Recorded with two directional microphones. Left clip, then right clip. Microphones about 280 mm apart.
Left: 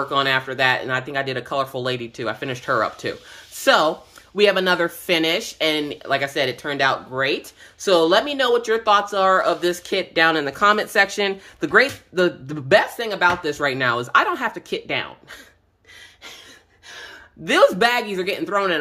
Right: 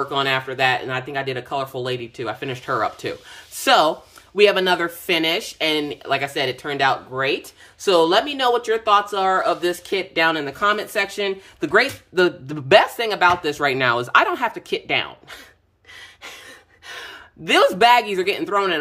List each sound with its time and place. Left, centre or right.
0.1 s speech: centre
16.8 s speech: centre